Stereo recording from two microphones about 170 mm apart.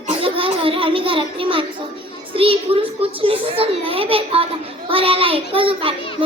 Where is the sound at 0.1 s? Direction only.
30° right (ahead or behind).